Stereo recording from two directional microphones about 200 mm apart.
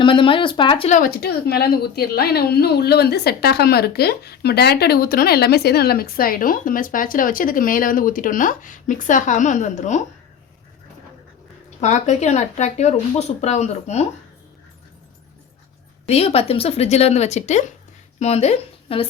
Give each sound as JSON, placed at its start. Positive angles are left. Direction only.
{"t": 0.0, "sound": "speech", "side_deg": 25}
{"t": 0.9, "sound": "a woman's voice", "side_deg": 40}
{"t": 11.8, "sound": "speech", "side_deg": 35}
{"t": 16.0, "sound": "speech", "side_deg": 30}